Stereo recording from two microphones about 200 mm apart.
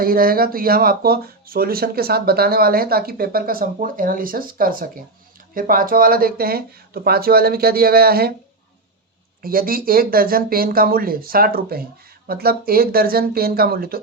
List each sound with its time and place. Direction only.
0.0 s speech: 45° right (ahead or behind)
9.4 s speech: 45° right (ahead or behind)